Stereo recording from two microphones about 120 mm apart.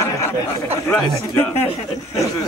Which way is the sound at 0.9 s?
15° left (ahead or behind).